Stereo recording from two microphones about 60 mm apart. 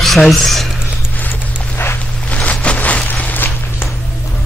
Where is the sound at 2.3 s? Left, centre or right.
Left.